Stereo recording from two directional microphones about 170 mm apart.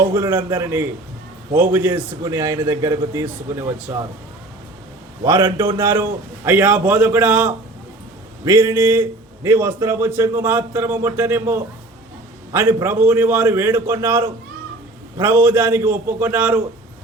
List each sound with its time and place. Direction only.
0.0 s a man's voice: 15° right (ahead or behind)
5.2 s a man's voice: 15° right (ahead or behind)